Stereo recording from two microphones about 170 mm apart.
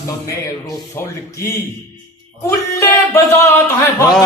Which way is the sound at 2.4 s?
15° left (ahead or behind).